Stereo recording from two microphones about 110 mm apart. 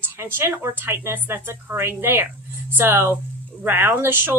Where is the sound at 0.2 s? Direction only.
20° right (ahead or behind).